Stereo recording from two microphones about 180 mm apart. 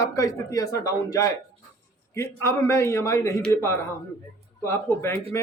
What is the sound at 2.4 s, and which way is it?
A man's voice, 15° left (ahead or behind).